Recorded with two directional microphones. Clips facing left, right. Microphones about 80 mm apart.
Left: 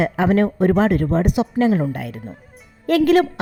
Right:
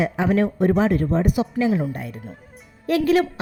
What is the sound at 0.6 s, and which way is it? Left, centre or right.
Speech, left.